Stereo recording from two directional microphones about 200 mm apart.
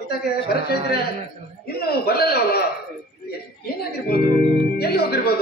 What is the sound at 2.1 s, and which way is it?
Speech, 50° left (ahead or behind).